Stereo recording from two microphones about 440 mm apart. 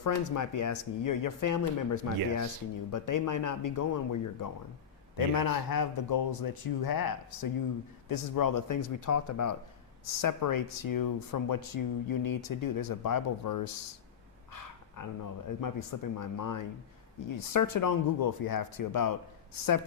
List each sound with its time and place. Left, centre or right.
0.0 s speech: left
15.0 s speech: left